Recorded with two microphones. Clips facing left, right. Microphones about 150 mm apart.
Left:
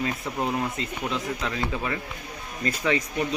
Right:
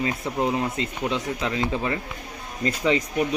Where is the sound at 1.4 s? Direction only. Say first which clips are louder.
Right 3 dB; 30° right (ahead or behind).